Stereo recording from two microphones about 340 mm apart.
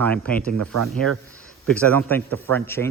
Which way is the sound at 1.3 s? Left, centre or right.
Centre.